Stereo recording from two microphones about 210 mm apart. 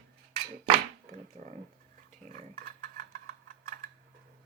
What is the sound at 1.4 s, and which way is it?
Speech, 40° right (ahead or behind).